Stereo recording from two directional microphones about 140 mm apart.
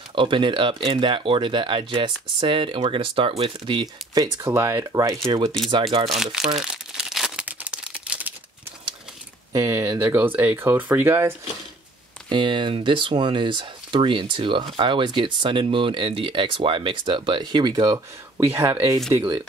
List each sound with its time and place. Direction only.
0.1 s speech: 35° right (ahead or behind)
6.0 s crumpling: centre (ahead or behind)
9.5 s speech: 20° right (ahead or behind)
12.3 s speech: 35° right (ahead or behind)